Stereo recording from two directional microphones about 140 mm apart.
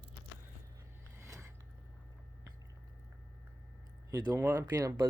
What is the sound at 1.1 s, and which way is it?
Mechanisms, 20° right (ahead or behind).